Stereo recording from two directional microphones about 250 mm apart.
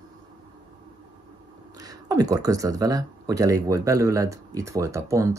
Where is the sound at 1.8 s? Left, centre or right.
Centre.